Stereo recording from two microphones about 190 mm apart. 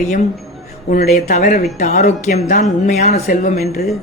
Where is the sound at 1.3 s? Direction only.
35° left (ahead or behind).